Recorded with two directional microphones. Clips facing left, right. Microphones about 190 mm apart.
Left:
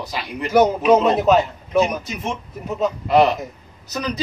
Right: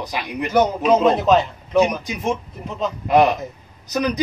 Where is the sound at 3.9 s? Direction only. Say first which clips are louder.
Right 4 dB; 15° right (ahead or behind).